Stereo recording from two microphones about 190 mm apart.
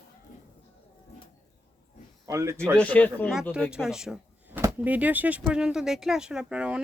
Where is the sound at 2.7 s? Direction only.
5° left (ahead or behind).